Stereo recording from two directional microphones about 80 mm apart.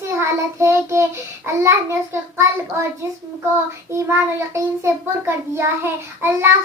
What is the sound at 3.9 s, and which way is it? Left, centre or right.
A child's voice, right.